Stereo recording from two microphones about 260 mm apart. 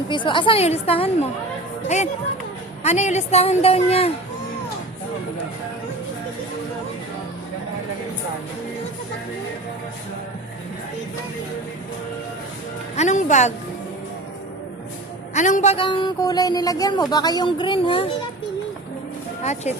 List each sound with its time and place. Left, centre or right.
0.1 s a woman's voice: centre
13.0 s music: left
15.4 s speech: left
19.4 s speech: left